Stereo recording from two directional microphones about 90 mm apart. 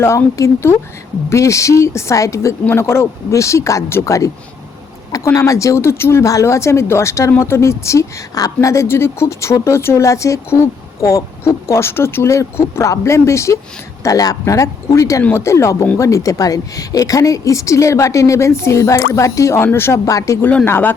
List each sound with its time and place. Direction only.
0.0 s speech: 35° left (ahead or behind)
15.2 s speech: 25° left (ahead or behind)
20.1 s speech: 35° left (ahead or behind)
20.7 s speech: 25° left (ahead or behind)